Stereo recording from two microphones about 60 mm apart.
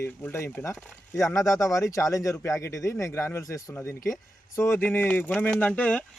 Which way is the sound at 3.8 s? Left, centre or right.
Left.